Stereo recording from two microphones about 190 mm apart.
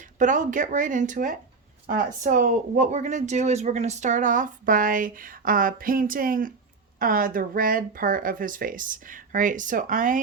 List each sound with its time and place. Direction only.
0.0 s speech: 40° right (ahead or behind)